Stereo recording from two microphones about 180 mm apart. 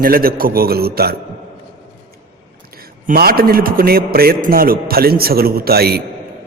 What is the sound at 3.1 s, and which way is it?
A man's voice, 55° right (ahead or behind).